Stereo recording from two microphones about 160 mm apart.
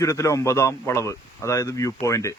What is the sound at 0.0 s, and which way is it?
A man's voice, 20° left (ahead or behind).